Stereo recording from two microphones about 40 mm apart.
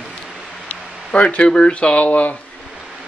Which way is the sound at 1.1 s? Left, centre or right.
Left.